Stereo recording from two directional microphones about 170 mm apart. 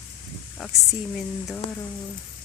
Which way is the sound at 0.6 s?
Centre (ahead or behind).